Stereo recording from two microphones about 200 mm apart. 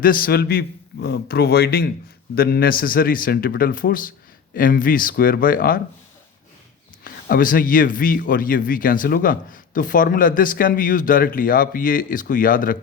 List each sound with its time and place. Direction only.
0.0 s speech: 45° left (ahead or behind)
7.0 s speech: 45° left (ahead or behind)